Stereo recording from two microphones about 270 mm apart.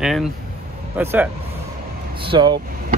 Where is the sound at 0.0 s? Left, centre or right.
Centre.